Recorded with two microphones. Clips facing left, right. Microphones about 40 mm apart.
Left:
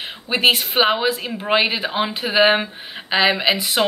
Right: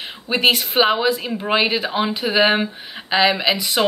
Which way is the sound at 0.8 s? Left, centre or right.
Centre.